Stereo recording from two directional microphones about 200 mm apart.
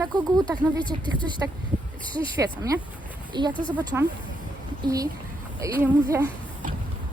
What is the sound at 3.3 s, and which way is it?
Speech, 20° right (ahead or behind).